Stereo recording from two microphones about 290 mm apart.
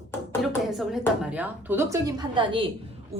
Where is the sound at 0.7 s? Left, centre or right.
Centre.